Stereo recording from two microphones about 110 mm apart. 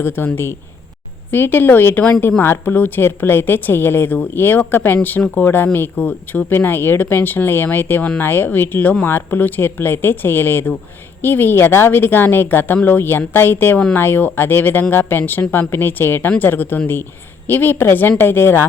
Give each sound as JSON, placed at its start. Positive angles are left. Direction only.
{"t": 0.2, "sound": "speech", "side_deg": 20}